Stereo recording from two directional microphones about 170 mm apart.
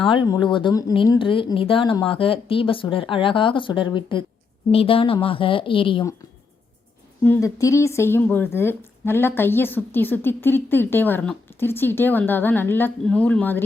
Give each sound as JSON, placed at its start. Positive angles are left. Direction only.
{"t": 0.0, "sound": "a woman's voice", "side_deg": 30}
{"t": 7.3, "sound": "a woman's voice", "side_deg": 20}